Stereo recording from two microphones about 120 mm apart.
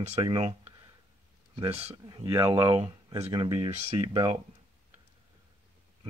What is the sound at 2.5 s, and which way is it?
Speech, 30° right (ahead or behind).